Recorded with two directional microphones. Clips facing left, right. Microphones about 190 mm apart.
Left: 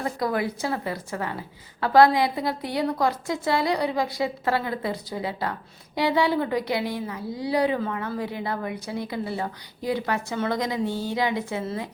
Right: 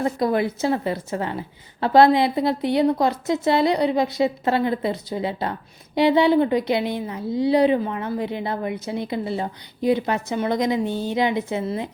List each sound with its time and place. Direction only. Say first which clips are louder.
0.0 s a woman's voice: right 5 dB; 25° right (ahead or behind)